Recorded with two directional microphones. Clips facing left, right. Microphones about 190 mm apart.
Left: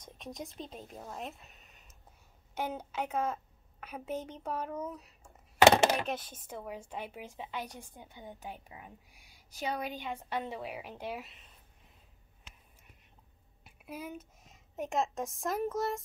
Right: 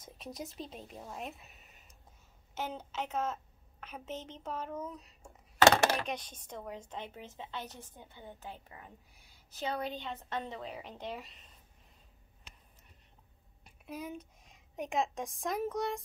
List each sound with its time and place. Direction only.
0.0 s a sound: centre (ahead or behind)
0.6 s a woman's voice: centre (ahead or behind)
2.5 s a woman's voice: 10° left (ahead or behind)
5.6 s a sound: 20° left (ahead or behind)
6.0 s a woman's voice: 5° left (ahead or behind)
13.7 s a woman's voice: 5° left (ahead or behind)